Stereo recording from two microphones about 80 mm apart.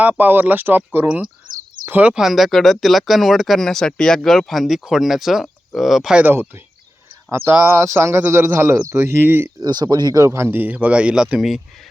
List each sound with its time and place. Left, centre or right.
0.0 s speech: right
1.9 s speech: centre
6.1 s speech: right
7.3 s speech: right
9.6 s speech: right
10.2 s speech: right; by 11.6 s centre